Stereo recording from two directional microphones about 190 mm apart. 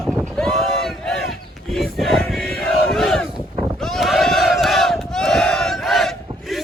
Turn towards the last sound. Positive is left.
turn(degrees=0)  # may be behind; listen again after turning